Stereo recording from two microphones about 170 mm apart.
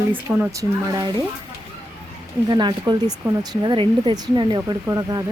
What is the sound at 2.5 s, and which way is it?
Speech, 25° right (ahead or behind).